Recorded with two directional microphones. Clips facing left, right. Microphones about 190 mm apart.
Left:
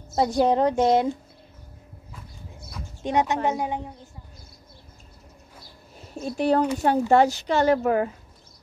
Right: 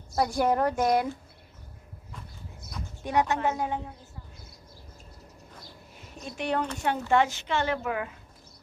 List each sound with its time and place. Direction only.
0.1 s a woman's voice: 20° left (ahead or behind)
3.0 s a woman's voice: 20° left (ahead or behind)
6.2 s a woman's voice: 35° left (ahead or behind)